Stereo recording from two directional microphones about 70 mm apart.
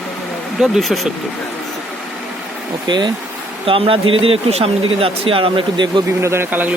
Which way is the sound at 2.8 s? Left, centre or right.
Right.